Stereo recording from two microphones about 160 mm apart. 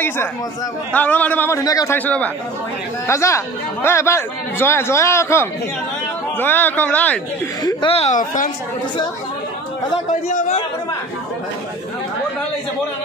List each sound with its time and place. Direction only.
0.9 s speech: 10° left (ahead or behind)
2.0 s speech: 10° left (ahead or behind)
7.6 s speech: 35° left (ahead or behind)
10.0 s a man's voice: 50° left (ahead or behind)